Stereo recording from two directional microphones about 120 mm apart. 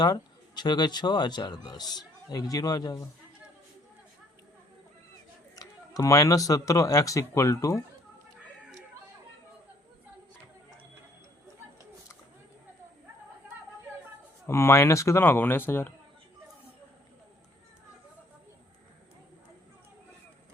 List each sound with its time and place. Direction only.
0.0 s speech: 35° left (ahead or behind)
5.5 s speech: 30° left (ahead or behind)
14.4 s speech: 20° left (ahead or behind)